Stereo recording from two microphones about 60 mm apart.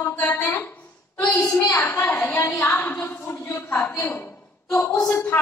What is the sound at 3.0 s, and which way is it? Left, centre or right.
Speech, left.